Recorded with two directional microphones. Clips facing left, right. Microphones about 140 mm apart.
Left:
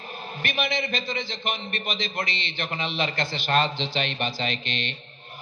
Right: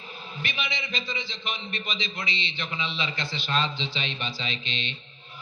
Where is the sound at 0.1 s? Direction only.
45° left (ahead or behind).